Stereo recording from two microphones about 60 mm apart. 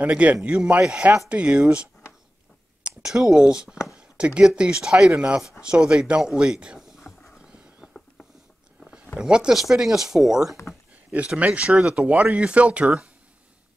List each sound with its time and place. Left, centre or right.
0.0 s speech: right
3.0 s speech: centre
3.9 s chopping: centre
5.6 s speech: centre
7.0 s clip-clop: centre
7.4 s a sound: centre
9.2 s speech: centre
11.2 s speech: right